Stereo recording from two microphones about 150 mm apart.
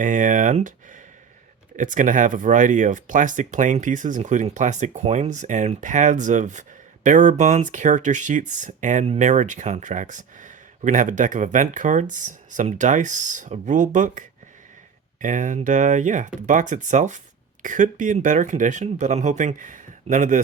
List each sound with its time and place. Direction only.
0.0 s speech: 60° right (ahead or behind)